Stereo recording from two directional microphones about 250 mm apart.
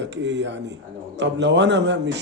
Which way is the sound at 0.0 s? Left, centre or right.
Right.